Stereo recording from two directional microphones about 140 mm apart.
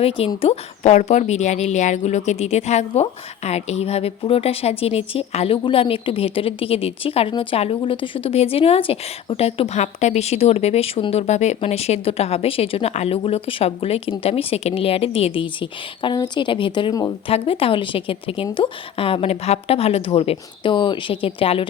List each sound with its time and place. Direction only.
0.4 s a woman's voice: 50° left (ahead or behind); by 17.1 s 30° left (ahead or behind)
17.2 s a woman's voice: 40° left (ahead or behind)